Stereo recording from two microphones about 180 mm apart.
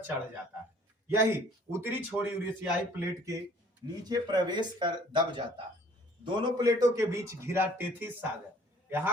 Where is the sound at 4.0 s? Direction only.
20° right (ahead or behind).